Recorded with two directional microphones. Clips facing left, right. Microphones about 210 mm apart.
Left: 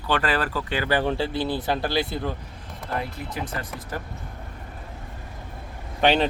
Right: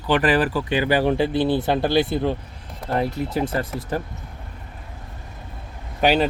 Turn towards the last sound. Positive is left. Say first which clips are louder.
# right 2 dB
turn(degrees=-5)  # may be behind; listen again after turning